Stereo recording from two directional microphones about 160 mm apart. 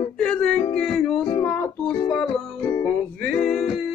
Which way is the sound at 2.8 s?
5° left (ahead or behind).